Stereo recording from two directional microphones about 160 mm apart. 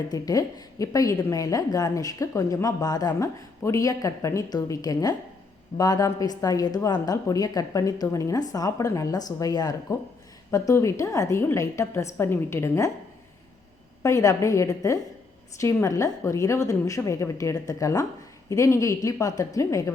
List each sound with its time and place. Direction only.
0.1 s a woman's voice: 25° left (ahead or behind)
14.0 s a woman's voice: 20° left (ahead or behind)